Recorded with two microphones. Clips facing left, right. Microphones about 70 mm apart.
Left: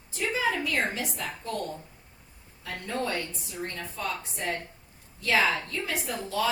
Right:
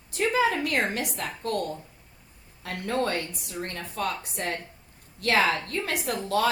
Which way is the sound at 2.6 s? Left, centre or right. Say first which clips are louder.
Right 4 dB; right.